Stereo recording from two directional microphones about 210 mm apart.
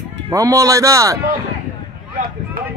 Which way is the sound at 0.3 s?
15° right (ahead or behind).